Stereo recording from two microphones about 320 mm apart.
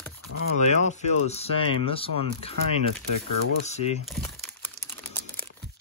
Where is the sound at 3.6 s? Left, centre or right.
Left.